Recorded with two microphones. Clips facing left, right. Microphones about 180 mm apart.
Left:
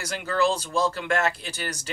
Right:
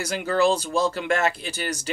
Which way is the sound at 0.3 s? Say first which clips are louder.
Right 3 dB; 20° right (ahead or behind).